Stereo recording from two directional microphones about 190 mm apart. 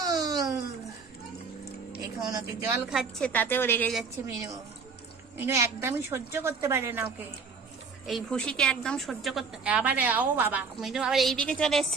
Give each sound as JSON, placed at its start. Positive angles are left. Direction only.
{"t": 0.0, "sound": "a sound", "side_deg": -20}
{"t": 2.0, "sound": "speech", "side_deg": -20}
{"t": 2.9, "sound": "a woman's voice", "side_deg": 0}
{"t": 4.2, "sound": "a woman's voice", "side_deg": -15}
{"t": 5.4, "sound": "a woman's voice", "side_deg": -15}
{"t": 8.0, "sound": "a woman's voice", "side_deg": 0}